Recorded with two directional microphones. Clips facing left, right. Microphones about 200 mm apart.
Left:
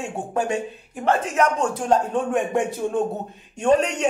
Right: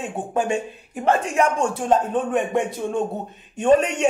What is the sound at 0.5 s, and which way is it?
Speech, 15° right (ahead or behind).